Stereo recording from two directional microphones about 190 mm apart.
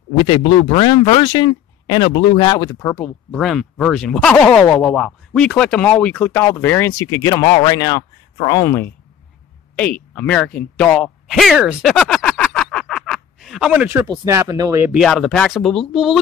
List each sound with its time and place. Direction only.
0.2 s speech: 30° left (ahead or behind); by 3.1 s 15° left (ahead or behind)
3.3 s speech: centre (ahead or behind)
10.8 s a sound: 5° left (ahead or behind)
14.2 s speech: 15° right (ahead or behind)
14.9 s speech: centre (ahead or behind)